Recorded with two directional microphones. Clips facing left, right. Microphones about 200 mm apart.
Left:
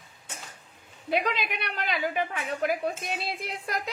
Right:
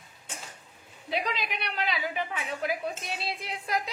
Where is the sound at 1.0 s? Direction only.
55° left (ahead or behind).